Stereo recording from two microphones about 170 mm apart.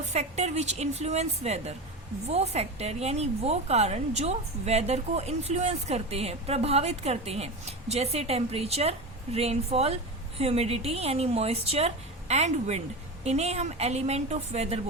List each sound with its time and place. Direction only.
0.0 s a woman's voice: 40° right (ahead or behind)